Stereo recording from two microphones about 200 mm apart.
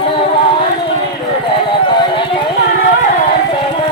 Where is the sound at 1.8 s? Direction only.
25° left (ahead or behind).